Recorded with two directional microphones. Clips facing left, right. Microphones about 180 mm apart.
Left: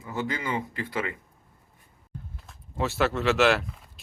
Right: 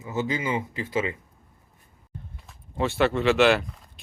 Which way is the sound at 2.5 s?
Centre (ahead or behind).